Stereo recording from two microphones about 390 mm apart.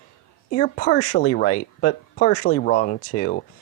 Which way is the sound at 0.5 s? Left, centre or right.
Left.